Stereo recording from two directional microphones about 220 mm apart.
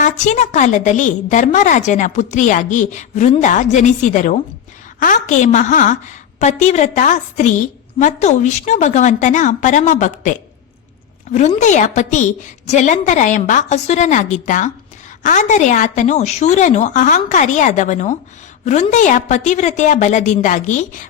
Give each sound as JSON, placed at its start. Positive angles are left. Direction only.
{"t": 0.0, "sound": "a woman's voice", "side_deg": 35}